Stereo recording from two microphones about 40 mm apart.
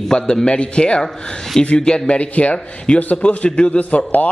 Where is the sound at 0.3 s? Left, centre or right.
Left.